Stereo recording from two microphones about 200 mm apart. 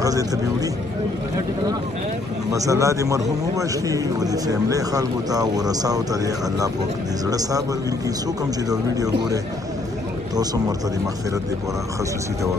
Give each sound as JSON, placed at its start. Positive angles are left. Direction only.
{"t": 0.0, "sound": "a man's voice", "side_deg": -15}
{"t": 2.5, "sound": "a man's voice", "side_deg": -15}
{"t": 8.6, "sound": "a man's voice", "side_deg": -20}